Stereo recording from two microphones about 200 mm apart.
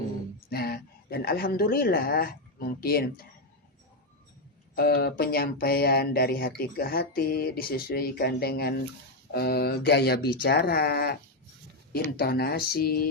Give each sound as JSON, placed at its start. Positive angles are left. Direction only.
{"t": 0.5, "sound": "speech", "side_deg": 50}
{"t": 4.7, "sound": "speech", "side_deg": 45}